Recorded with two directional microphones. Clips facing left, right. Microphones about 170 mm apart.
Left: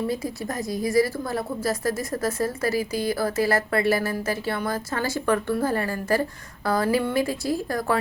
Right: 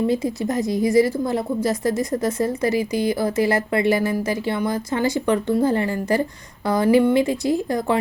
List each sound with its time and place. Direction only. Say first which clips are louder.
0.1 s a woman's voice: right 7 dB; 20° right (ahead or behind)